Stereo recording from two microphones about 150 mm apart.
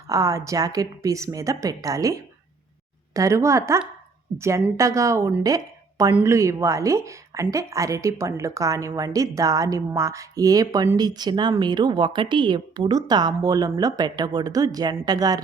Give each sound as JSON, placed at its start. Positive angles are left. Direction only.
{"t": 0.1, "sound": "a woman's voice", "side_deg": -20}